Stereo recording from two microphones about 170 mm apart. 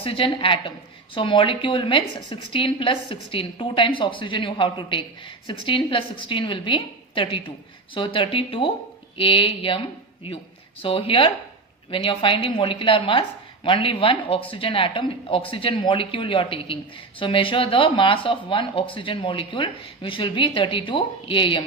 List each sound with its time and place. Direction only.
0.0 s a woman's voice: 30° left (ahead or behind)